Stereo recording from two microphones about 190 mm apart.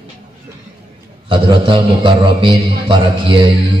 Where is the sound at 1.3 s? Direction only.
25° right (ahead or behind).